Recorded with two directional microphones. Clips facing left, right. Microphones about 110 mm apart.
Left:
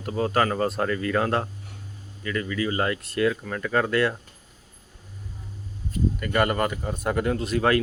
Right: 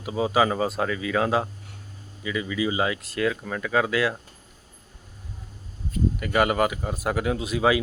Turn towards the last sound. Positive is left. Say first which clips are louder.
# even
turn(degrees=-5)  # may be behind; listen again after turning